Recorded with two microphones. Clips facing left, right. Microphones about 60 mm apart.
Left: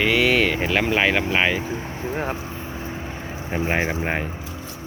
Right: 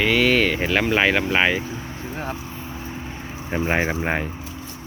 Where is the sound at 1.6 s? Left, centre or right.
Left.